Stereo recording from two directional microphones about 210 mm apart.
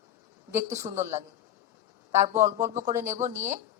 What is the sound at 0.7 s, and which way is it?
Speech, 35° right (ahead or behind).